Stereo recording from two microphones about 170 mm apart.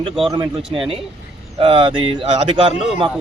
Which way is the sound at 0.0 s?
30° right (ahead or behind).